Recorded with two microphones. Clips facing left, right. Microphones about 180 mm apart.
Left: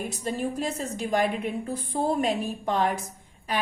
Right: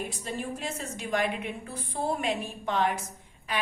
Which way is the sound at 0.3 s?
40° left (ahead or behind).